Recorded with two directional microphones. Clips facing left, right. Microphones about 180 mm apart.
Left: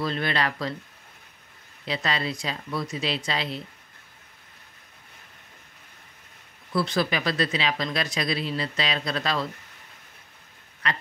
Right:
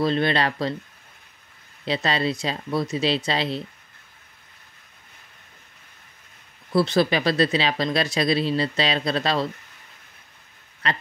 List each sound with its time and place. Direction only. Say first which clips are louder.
0.0 s speech: right 5 dB; 25° right (ahead or behind)
1.9 s speech: right 5 dB; 30° right (ahead or behind)
6.7 s speech: right 5 dB; 30° right (ahead or behind)
10.8 s speech: right 3 dB; 30° right (ahead or behind)